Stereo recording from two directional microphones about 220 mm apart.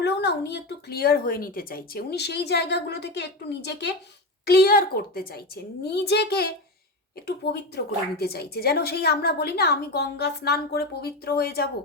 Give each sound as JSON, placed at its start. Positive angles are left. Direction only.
{"t": 0.0, "sound": "speech", "side_deg": 50}